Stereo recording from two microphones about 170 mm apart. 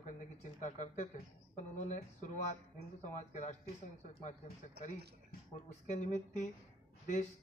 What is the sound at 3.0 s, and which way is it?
Speech, 45° left (ahead or behind).